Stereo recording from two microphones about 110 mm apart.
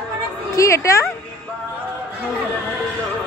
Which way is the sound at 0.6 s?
25° left (ahead or behind).